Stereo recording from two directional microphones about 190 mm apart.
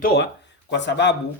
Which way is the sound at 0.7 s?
65° left (ahead or behind).